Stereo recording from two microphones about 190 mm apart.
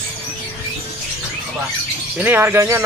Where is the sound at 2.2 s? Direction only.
10° right (ahead or behind).